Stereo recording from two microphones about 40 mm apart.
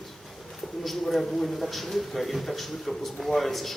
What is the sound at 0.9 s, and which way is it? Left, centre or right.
A man's voice, centre.